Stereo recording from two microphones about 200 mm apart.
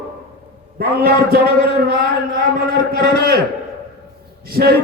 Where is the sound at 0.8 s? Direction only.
50° right (ahead or behind).